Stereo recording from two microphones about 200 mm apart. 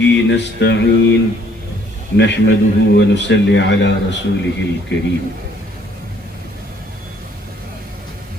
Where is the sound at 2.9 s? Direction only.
65° left (ahead or behind).